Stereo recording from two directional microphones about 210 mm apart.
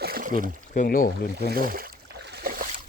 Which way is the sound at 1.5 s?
45° right (ahead or behind).